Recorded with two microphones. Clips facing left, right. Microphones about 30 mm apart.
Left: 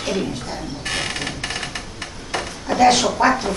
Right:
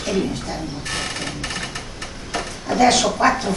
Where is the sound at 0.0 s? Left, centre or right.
Centre.